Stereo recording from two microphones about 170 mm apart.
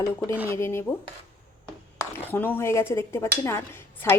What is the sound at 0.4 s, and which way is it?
Speech, 15° left (ahead or behind).